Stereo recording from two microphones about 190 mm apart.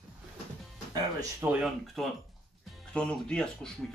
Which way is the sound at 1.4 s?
5° right (ahead or behind).